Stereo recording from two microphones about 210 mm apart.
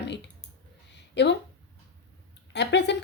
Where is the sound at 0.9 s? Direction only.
55° left (ahead or behind).